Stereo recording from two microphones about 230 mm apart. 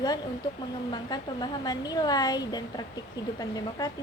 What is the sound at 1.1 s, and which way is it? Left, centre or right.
A woman's voice, centre.